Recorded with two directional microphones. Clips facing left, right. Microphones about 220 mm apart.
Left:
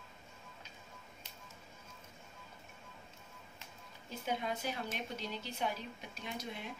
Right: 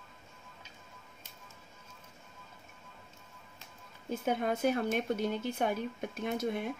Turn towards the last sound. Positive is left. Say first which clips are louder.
# right 11 dB
turn(degrees=-50)  # may be behind; listen again after turning